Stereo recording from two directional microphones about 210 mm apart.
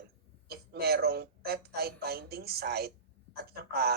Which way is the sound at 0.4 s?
50° right (ahead or behind).